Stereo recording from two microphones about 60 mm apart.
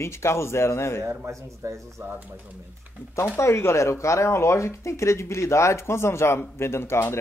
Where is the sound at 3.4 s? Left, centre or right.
Left.